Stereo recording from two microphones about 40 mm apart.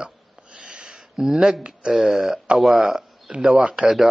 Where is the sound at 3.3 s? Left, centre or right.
Right.